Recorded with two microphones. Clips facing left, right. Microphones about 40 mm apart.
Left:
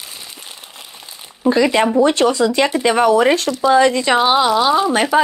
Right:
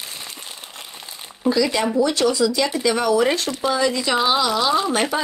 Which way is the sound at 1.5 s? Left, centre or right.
Left.